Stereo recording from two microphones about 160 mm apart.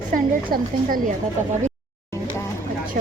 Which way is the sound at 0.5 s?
65° right (ahead or behind).